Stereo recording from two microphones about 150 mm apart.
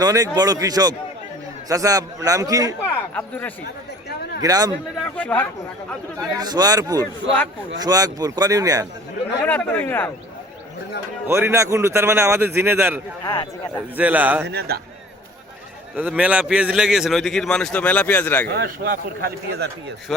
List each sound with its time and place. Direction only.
0.0 s a man's voice: 25° right (ahead or behind)
3.2 s speech: 10° left (ahead or behind)
4.4 s a man's voice: 25° right (ahead or behind)
5.1 s speech: 10° left (ahead or behind)
6.1 s a man's voice: 25° right (ahead or behind)
9.2 s speech: 10° left (ahead or behind)
11.3 s a man's voice: 15° right (ahead or behind)
13.2 s a man's voice: 30° left (ahead or behind)
13.9 s a man's voice: 10° right (ahead or behind)
14.4 s a man's voice: 90° right
16.0 s a man's voice: 5° right (ahead or behind); by 18.4 s 10° left (ahead or behind)
18.4 s a man's voice: 90° right
20.1 s a man's voice: 5° left (ahead or behind)